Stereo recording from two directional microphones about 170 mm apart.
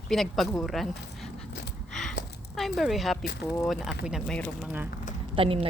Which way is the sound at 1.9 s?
5° left (ahead or behind).